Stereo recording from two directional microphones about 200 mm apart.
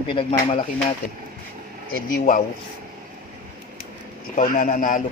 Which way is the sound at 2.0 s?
40° left (ahead or behind).